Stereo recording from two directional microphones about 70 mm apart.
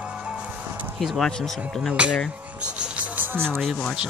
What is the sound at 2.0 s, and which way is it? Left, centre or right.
Speech, centre.